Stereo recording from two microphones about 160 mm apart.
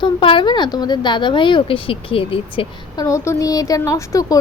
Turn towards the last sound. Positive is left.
turn(degrees=20)  # may be behind; listen again after turning